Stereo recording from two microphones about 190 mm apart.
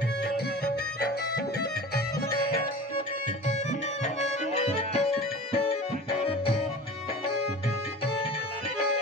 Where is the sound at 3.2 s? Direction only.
40° left (ahead or behind).